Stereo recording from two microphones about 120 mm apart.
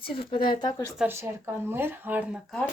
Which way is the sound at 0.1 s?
45° left (ahead or behind).